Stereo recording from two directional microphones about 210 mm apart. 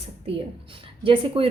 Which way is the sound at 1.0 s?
25° right (ahead or behind).